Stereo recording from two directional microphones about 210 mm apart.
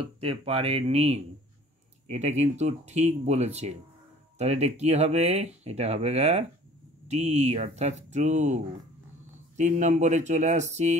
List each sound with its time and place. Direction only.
0.2 s speech: 25° right (ahead or behind)